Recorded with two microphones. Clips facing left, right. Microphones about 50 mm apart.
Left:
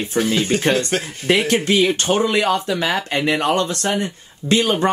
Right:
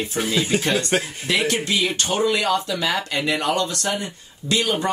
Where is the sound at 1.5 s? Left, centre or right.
Left.